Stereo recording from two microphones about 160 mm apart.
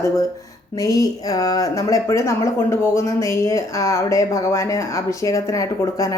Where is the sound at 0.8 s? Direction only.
20° left (ahead or behind).